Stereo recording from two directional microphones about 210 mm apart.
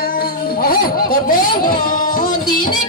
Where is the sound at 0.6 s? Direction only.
45° left (ahead or behind).